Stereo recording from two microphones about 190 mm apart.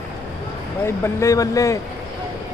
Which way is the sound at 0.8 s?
15° left (ahead or behind).